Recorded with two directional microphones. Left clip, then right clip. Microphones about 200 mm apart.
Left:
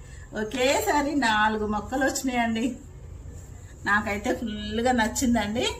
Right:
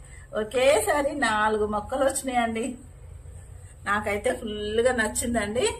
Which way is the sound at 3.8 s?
40° right (ahead or behind).